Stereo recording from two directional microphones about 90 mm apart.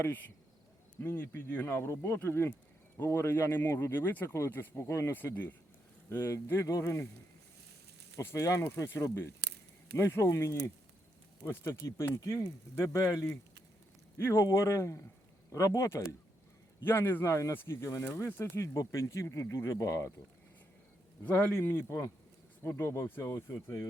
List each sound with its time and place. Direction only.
1.0 s speech: 25° left (ahead or behind)
5.1 s speech: 20° left (ahead or behind)
8.1 s speech: 30° left (ahead or behind)
16.8 s speech: 25° left (ahead or behind)
21.2 s speech: 20° left (ahead or behind)
23.2 s speech: 35° left (ahead or behind)